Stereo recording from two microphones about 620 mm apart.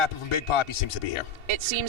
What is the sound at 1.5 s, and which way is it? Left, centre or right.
Speech, right.